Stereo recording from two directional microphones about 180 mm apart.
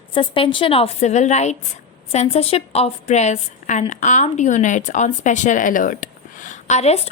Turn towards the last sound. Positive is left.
turn(degrees=35)  # may be behind; listen again after turning